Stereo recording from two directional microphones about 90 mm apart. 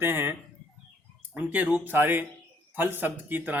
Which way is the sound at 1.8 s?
25° right (ahead or behind).